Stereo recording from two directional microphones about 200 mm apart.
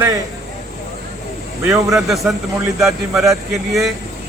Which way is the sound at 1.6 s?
15° right (ahead or behind).